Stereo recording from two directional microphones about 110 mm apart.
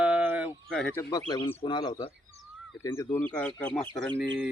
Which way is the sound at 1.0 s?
35° left (ahead or behind).